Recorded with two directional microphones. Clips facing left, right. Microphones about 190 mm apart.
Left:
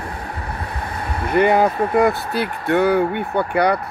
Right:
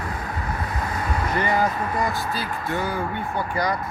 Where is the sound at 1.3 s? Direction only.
60° left (ahead or behind).